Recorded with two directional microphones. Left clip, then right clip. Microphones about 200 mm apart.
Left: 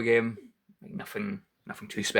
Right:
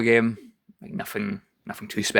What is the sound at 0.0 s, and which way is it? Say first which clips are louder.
Speech: right 5 dB; 45° right (ahead or behind).